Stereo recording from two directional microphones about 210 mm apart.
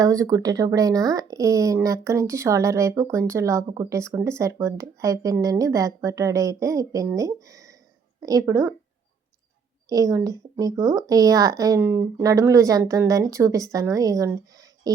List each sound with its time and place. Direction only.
0.0 s speech: 15° right (ahead or behind)
9.9 s speech: 15° right (ahead or behind)